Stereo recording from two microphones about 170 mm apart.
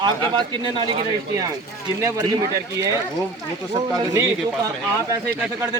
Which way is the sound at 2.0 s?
20° right (ahead or behind).